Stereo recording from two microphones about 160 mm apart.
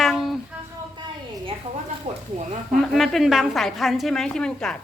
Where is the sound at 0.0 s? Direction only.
Centre (ahead or behind).